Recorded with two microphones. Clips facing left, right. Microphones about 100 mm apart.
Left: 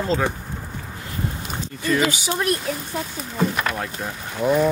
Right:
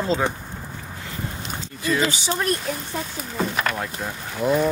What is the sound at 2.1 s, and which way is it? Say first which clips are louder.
Speech: left 1 dB; 30° right (ahead or behind).